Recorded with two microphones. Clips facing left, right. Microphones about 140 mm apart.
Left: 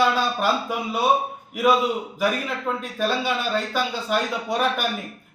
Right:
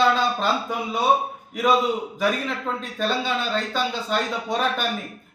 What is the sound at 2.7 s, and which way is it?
A man's voice, 10° left (ahead or behind).